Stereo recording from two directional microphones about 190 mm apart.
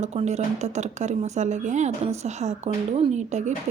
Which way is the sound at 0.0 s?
35° right (ahead or behind).